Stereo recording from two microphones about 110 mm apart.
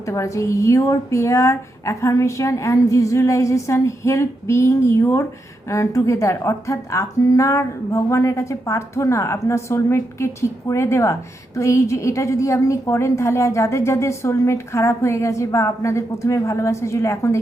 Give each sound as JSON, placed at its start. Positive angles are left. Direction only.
{"t": 0.0, "sound": "speech", "side_deg": 25}